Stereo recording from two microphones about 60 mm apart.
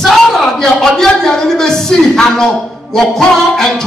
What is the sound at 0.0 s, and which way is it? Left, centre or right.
A man's voice, centre.